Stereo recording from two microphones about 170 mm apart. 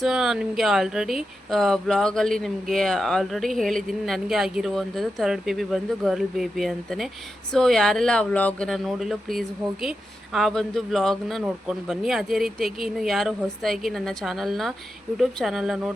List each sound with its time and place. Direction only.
0.0 s speech: centre (ahead or behind)